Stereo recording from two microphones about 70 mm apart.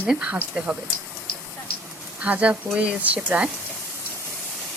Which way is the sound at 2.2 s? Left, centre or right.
Centre.